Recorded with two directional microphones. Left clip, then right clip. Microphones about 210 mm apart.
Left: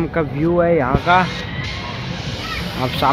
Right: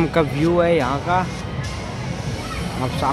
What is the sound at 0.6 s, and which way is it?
Speech, 5° left (ahead or behind).